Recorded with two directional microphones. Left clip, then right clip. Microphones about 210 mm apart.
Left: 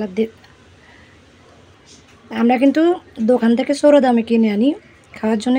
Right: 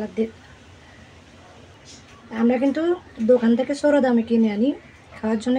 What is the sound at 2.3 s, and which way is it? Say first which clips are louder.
A woman's voice: left 6 dB; 40° left (ahead or behind).